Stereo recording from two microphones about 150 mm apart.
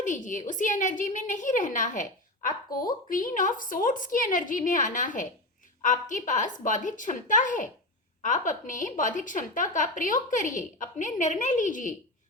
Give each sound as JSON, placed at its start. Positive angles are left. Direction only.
{"t": 0.0, "sound": "a woman's voice", "side_deg": 60}